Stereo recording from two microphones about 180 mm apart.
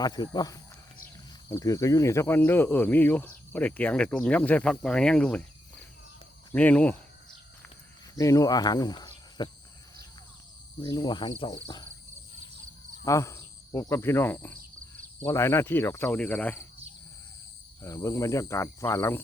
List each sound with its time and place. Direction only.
0.0 s speech: 20° left (ahead or behind); by 5.5 s 5° left (ahead or behind)
6.5 s speech: 10° left (ahead or behind)
8.1 s speech: 20° left (ahead or behind)
10.8 s speech: 20° left (ahead or behind)
13.1 s speech: 15° left (ahead or behind)
17.8 s speech: 15° left (ahead or behind)